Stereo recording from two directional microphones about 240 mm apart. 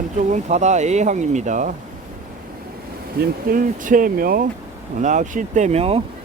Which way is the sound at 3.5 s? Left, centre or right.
Right.